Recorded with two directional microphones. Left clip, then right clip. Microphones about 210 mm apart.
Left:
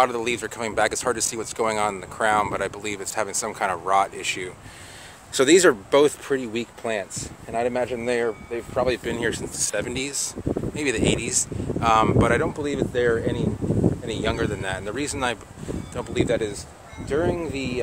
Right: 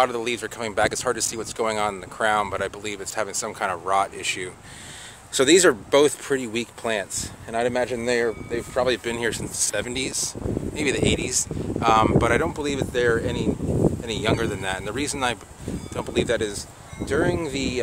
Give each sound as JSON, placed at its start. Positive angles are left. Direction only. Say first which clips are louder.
{"t": 0.0, "sound": "speech", "louder": "left 1 dB", "side_deg": 5}